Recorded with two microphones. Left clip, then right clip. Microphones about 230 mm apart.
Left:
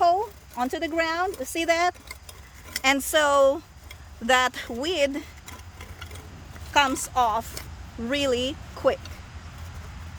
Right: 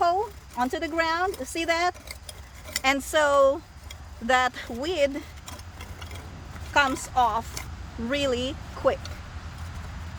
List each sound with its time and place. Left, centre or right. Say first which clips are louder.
0.0 s a sound: left 2 dB; left
1.5 s speech: left 3 dB; left
2.0 s cutlery: right 1 dB; centre
2.8 s speech: left 1 dB; left
6.7 s speech: left 1 dB; left